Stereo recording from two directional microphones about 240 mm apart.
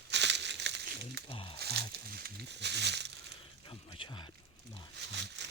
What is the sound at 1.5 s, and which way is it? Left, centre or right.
Speech, right.